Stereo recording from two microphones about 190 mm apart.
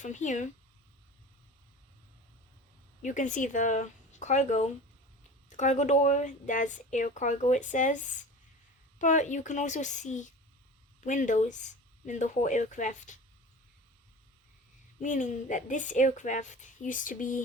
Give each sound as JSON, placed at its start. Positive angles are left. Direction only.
{"t": 0.0, "sound": "a woman's voice", "side_deg": 40}
{"t": 3.0, "sound": "a woman's voice", "side_deg": 40}
{"t": 15.0, "sound": "a woman's voice", "side_deg": 40}